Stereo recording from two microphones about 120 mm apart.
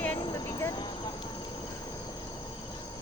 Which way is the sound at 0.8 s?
40° left (ahead or behind).